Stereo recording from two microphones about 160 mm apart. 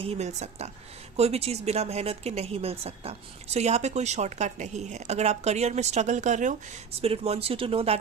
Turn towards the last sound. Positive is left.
turn(degrees=-35)  # may be behind; listen again after turning